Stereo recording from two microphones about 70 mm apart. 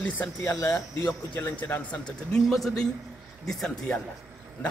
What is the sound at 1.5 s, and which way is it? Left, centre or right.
Speech, left.